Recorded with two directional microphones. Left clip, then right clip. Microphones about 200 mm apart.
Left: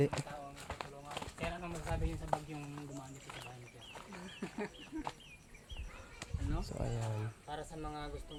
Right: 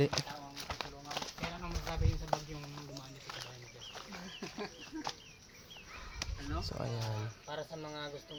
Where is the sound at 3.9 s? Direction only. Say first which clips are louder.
Right 2 dB; 45° right (ahead or behind).